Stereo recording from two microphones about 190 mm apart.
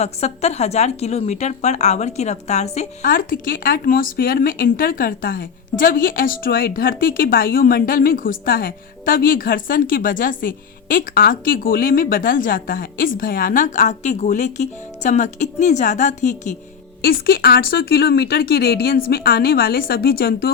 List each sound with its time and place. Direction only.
0.0 s a woman's voice: 35° left (ahead or behind)
3.0 s speech: 50° left (ahead or behind)
17.0 s speech: 55° left (ahead or behind)